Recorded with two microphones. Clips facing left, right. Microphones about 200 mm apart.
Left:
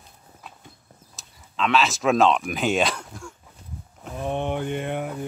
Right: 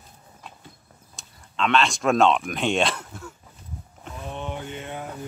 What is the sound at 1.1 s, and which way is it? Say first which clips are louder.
Speech: even; centre (ahead or behind).